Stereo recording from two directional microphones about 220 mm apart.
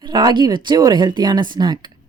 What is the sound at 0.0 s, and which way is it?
Speech, 20° right (ahead or behind).